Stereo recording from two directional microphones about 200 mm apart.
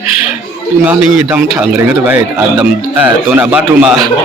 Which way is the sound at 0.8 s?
5° right (ahead or behind).